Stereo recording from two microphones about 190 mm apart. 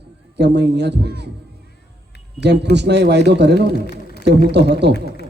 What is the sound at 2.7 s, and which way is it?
A man's voice, 65° right (ahead or behind).